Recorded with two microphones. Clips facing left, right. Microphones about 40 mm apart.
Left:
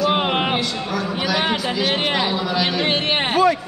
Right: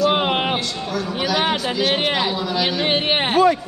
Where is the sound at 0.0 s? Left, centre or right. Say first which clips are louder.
Right 1 dB; centre.